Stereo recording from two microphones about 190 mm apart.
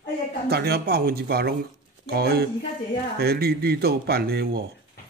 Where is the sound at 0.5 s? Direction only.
55° right (ahead or behind).